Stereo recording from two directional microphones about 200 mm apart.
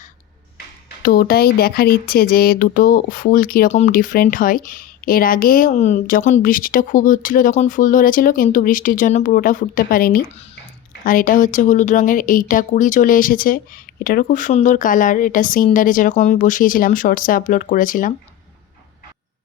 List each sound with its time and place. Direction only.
1.0 s speech: 50° left (ahead or behind)